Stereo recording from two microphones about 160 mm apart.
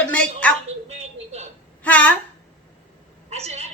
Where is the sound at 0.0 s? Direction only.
10° left (ahead or behind).